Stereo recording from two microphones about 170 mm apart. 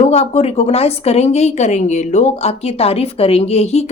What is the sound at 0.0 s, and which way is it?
Speech, 40° left (ahead or behind).